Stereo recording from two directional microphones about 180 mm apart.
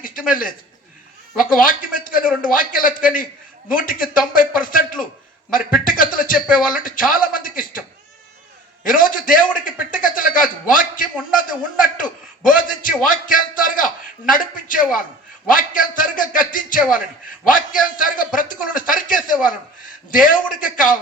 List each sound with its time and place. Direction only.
0.0 s a man's voice: 50° left (ahead or behind)